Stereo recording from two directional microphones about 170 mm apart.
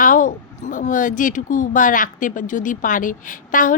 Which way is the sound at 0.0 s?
50° left (ahead or behind).